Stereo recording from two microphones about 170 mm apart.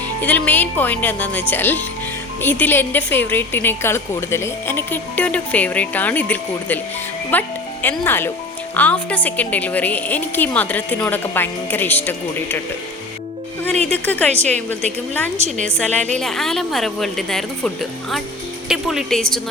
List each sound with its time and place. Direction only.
0.2 s a woman's voice: 10° left (ahead or behind)
13.8 s a woman's voice: 10° left (ahead or behind)
15.4 s a woman's voice: 40° right (ahead or behind)
15.6 s a woman's voice: 5° left (ahead or behind)
18.7 s speech: centre (ahead or behind)